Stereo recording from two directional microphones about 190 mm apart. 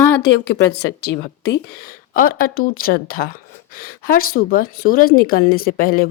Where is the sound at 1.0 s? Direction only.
60° left (ahead or behind).